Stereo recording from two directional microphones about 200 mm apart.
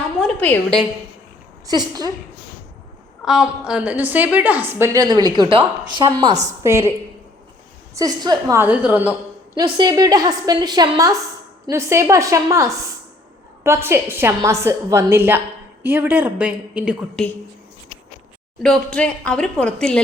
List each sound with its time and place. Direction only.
0.2 s a sound: 10° left (ahead or behind)
1.6 s a woman's voice: 20° right (ahead or behind)
3.2 s a woman's voice: 5° right (ahead or behind)
7.9 s a woman's voice: 20° right (ahead or behind)
9.6 s a woman's voice: 20° right (ahead or behind); by 17.2 s 5° right (ahead or behind)
18.6 s a woman's voice: 5° left (ahead or behind)